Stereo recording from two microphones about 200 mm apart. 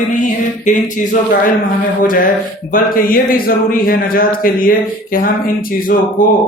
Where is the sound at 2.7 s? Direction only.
45° left (ahead or behind).